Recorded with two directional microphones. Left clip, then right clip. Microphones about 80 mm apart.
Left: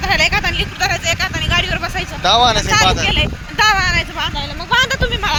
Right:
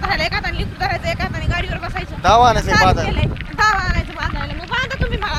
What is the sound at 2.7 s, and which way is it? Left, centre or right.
Speech, centre.